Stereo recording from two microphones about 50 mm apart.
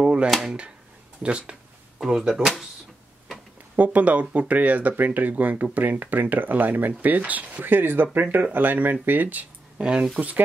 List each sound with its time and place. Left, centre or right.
0.0 s a sound: right
0.3 s speech: centre
1.2 s speech: right
2.0 s speech: centre
3.7 s speech: right
9.8 s speech: centre